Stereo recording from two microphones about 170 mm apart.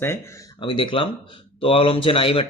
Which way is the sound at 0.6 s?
30° left (ahead or behind).